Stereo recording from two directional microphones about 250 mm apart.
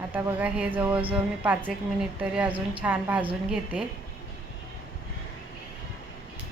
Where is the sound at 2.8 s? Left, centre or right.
Centre.